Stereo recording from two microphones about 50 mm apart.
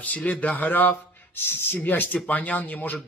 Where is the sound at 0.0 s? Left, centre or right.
Left.